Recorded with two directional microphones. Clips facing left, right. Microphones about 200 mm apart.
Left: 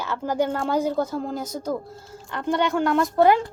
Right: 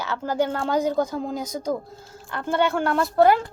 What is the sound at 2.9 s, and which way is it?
Speech, 15° left (ahead or behind).